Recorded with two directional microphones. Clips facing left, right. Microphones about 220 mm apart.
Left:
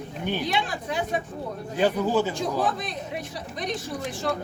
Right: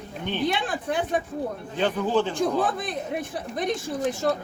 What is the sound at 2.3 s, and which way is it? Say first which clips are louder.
Speech: right 2 dB; 50° right (ahead or behind).